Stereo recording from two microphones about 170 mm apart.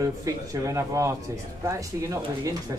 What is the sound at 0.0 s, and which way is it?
Speech, 20° right (ahead or behind).